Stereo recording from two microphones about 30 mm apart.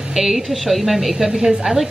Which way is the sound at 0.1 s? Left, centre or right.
Centre.